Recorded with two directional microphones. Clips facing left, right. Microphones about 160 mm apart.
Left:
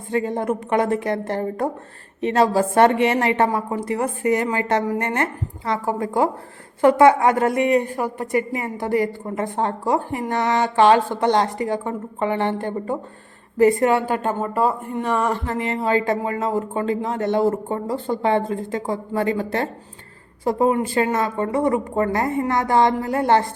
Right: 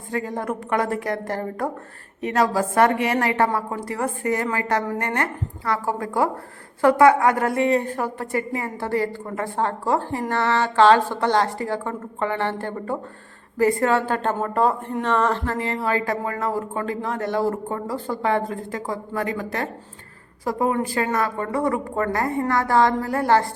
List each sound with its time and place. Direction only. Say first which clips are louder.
0.1 s a woman's voice: left 4 dB; 25° left (ahead or behind)